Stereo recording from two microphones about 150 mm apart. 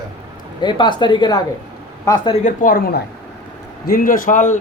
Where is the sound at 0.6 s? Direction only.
30° left (ahead or behind).